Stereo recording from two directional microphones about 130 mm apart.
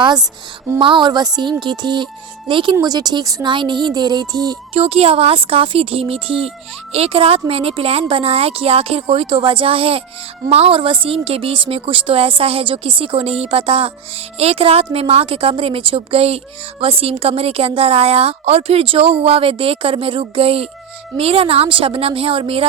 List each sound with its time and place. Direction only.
0.8 s speech: 40° right (ahead or behind)
4.7 s a woman's voice: 45° right (ahead or behind)